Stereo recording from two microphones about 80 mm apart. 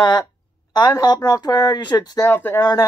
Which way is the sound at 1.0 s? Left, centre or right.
Left.